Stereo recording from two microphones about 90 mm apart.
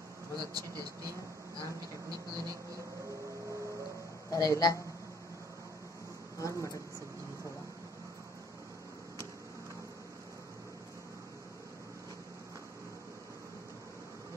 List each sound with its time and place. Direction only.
0.4 s speech: 45° right (ahead or behind)
4.3 s speech: 40° left (ahead or behind)
6.4 s speech: 35° left (ahead or behind)